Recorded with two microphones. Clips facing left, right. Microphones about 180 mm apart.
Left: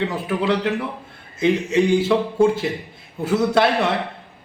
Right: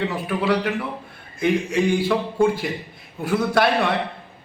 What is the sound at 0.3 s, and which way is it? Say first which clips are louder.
A man's voice: left 1 dB; 20° left (ahead or behind).